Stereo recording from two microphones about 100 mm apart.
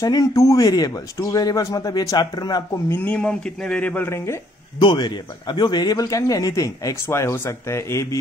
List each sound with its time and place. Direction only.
0.0 s speech: 40° left (ahead or behind)
2.9 s speech: 15° left (ahead or behind)
4.7 s speech: 50° left (ahead or behind); by 8.2 s 30° left (ahead or behind)